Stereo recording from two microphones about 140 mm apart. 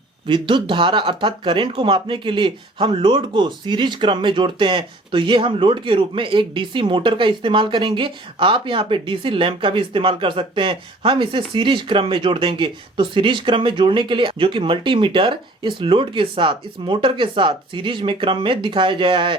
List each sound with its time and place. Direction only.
0.3 s speech: 35° right (ahead or behind)